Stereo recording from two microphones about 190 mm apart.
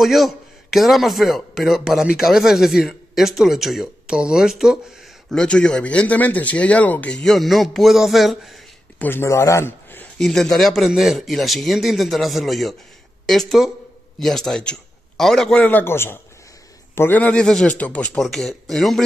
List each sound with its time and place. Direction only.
0.0 s a man's voice: centre (ahead or behind)
9.0 s a man's voice: 15° left (ahead or behind)